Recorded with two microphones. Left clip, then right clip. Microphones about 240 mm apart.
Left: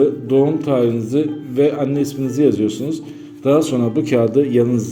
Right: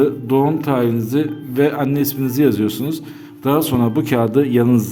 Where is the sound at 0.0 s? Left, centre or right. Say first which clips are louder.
Left 1 dB; right.